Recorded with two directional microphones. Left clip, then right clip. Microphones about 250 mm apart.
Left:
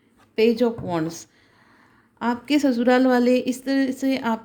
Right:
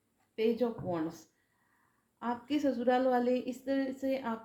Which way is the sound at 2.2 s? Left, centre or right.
Left.